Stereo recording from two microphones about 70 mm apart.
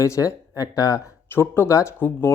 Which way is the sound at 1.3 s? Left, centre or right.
Left.